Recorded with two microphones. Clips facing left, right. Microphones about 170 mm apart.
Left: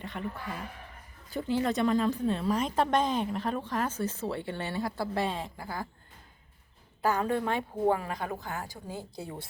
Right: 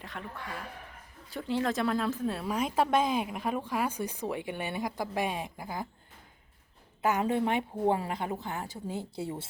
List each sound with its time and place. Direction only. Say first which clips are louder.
0.0 s speech: left 4 dB; centre (ahead or behind); by 5.9 s 20° right (ahead or behind)
7.0 s a woman's voice: right 1 dB; 20° right (ahead or behind)